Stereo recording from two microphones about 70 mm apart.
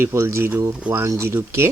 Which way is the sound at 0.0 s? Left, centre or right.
Right.